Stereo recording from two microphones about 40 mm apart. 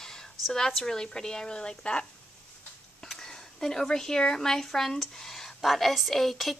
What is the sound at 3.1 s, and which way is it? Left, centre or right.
A woman's voice, centre.